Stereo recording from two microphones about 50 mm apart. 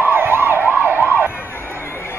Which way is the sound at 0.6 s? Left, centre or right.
Right.